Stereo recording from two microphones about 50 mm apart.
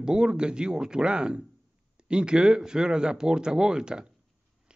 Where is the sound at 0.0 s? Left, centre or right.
Centre.